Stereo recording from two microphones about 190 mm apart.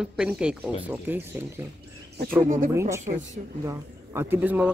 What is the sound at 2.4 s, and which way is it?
Speech, 45° right (ahead or behind).